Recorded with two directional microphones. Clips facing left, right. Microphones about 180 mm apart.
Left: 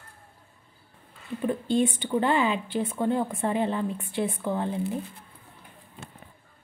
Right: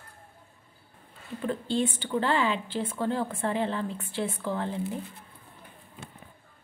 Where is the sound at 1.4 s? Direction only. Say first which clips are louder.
Left 4 dB; 15° left (ahead or behind).